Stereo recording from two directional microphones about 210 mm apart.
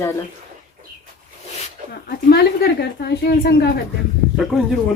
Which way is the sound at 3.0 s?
50° left (ahead or behind).